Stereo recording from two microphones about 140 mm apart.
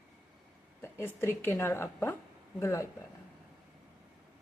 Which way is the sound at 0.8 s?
15° left (ahead or behind).